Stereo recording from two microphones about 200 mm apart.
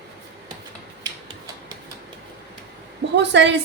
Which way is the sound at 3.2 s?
60° right (ahead or behind).